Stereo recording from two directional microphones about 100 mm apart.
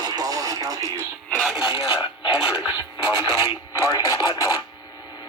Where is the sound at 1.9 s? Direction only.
50° left (ahead or behind).